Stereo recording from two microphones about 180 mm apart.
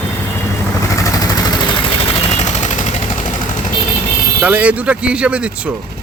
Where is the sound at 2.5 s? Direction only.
40° left (ahead or behind).